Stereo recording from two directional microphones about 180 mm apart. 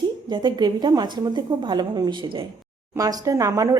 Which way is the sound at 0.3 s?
25° right (ahead or behind).